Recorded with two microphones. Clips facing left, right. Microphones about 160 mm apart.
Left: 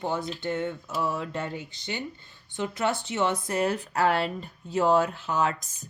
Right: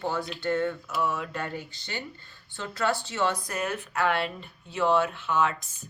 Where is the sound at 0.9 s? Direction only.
35° left (ahead or behind).